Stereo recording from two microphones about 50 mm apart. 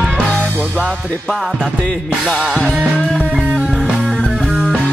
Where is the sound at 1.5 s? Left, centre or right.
Right.